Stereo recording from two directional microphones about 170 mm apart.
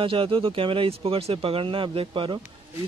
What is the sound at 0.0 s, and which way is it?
Speech, 30° right (ahead or behind).